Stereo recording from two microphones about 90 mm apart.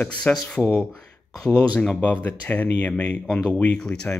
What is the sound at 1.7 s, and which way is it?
Speech, 15° left (ahead or behind).